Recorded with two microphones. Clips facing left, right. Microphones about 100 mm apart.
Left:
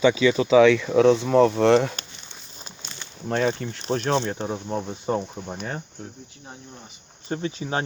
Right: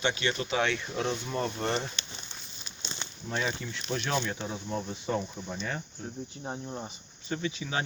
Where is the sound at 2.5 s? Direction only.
45° left (ahead or behind).